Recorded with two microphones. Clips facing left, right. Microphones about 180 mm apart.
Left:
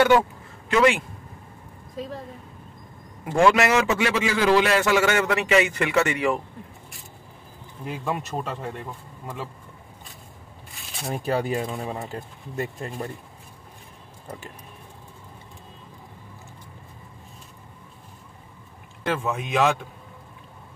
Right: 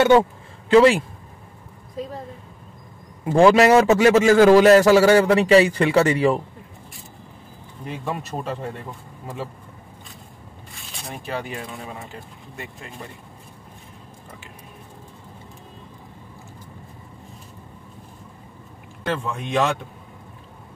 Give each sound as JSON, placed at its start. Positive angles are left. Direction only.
{"t": 0.7, "sound": "a man's voice", "side_deg": -35}
{"t": 3.3, "sound": "a man's voice", "side_deg": -30}
{"t": 8.0, "sound": "speech", "side_deg": 0}
{"t": 11.2, "sound": "speech", "side_deg": 40}
{"t": 19.0, "sound": "speech", "side_deg": 5}